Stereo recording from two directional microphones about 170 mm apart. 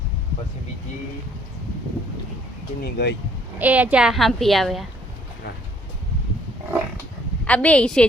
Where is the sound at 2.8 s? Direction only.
75° left (ahead or behind).